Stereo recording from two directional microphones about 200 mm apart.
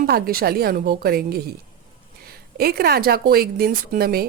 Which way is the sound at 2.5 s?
50° right (ahead or behind).